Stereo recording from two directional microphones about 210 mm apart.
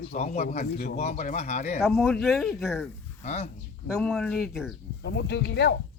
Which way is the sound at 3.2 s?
30° left (ahead or behind).